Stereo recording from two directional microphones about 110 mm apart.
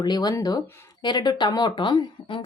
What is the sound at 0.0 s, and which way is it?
A woman's voice, 40° left (ahead or behind).